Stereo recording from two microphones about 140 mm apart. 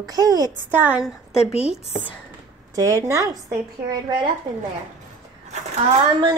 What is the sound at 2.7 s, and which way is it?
Speech, 25° right (ahead or behind).